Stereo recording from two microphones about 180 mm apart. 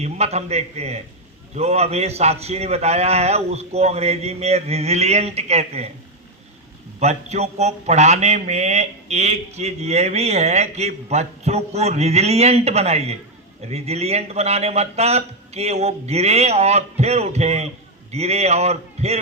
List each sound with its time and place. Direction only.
0.0 s a man's voice: 35° right (ahead or behind)
7.0 s a man's voice: 35° right (ahead or behind)